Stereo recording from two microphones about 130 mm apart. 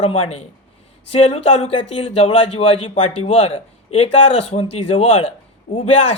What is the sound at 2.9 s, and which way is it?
A man's voice, 55° left (ahead or behind).